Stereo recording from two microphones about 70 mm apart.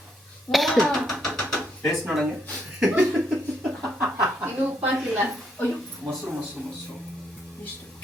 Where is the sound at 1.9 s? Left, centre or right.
Centre.